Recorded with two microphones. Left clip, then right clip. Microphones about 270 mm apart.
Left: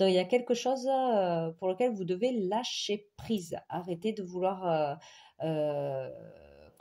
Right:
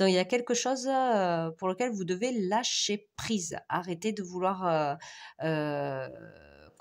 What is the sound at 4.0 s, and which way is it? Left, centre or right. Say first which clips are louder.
Speech: right 1 dB; right.